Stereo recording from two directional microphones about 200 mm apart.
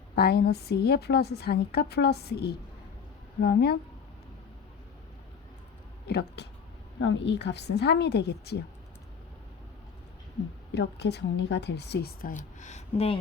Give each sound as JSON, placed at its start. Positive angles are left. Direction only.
{"t": 0.2, "sound": "a woman's voice", "side_deg": 55}
{"t": 6.1, "sound": "a woman's voice", "side_deg": 55}
{"t": 10.7, "sound": "a woman's voice", "side_deg": 55}